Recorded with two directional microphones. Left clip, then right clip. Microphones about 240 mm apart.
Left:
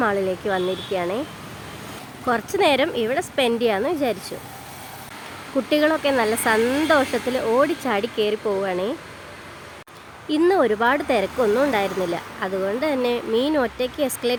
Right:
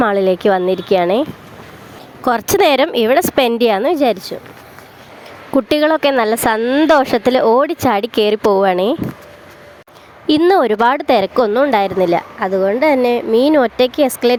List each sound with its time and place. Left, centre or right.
0.0 s speech: right
2.2 s speech: right
5.6 s speech: right
10.2 s speech: right